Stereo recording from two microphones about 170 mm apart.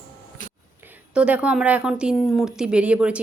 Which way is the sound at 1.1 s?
5° right (ahead or behind).